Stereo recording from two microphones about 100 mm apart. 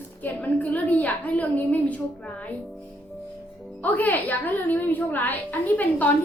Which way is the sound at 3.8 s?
15° left (ahead or behind).